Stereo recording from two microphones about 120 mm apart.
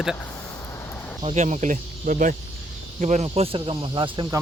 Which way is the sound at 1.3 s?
80° right.